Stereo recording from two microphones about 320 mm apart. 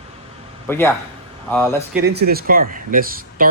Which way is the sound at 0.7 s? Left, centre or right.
Centre.